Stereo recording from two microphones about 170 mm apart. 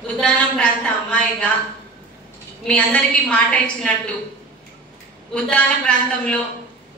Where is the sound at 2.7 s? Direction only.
5° left (ahead or behind).